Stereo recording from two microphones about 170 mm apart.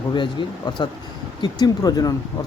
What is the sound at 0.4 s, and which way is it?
Speech, 25° left (ahead or behind).